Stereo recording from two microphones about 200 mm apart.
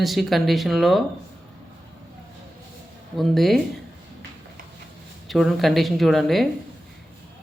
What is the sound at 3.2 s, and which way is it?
Speech, centre (ahead or behind).